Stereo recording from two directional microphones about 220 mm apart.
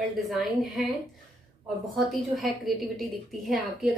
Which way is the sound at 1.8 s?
Centre (ahead or behind).